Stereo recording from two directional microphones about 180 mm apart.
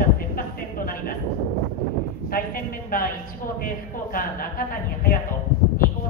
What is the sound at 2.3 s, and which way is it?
A man's voice, 50° left (ahead or behind).